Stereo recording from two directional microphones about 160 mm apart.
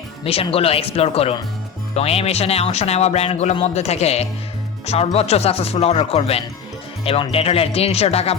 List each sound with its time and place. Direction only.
0.5 s speech: 35° left (ahead or behind)